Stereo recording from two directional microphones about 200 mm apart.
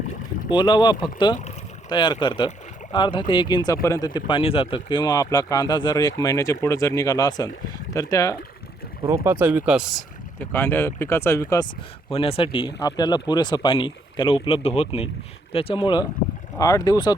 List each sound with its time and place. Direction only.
0.5 s speech: 20° left (ahead or behind)
9.0 s speech: 15° right (ahead or behind)
10.5 s speech: 10° left (ahead or behind)
12.1 s speech: 30° left (ahead or behind)